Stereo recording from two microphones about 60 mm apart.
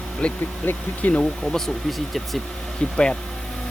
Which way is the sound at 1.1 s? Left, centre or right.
Centre.